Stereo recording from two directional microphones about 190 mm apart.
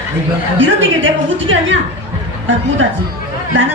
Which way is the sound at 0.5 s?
90° right.